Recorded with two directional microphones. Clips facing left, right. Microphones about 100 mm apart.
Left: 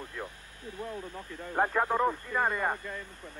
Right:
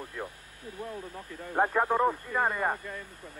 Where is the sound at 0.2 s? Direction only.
10° right (ahead or behind).